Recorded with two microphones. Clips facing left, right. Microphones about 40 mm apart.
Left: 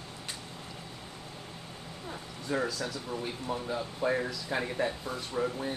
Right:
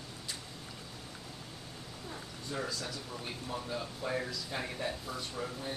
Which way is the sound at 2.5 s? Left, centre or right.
Left.